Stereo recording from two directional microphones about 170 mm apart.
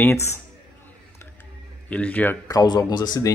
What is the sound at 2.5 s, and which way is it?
Speech, 20° left (ahead or behind).